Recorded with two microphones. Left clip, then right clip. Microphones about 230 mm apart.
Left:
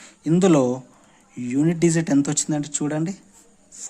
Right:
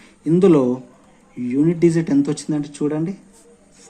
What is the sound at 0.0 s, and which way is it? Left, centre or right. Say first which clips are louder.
Speech: right 4 dB; left.